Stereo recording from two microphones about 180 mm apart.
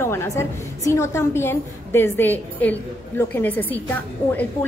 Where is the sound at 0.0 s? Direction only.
15° left (ahead or behind).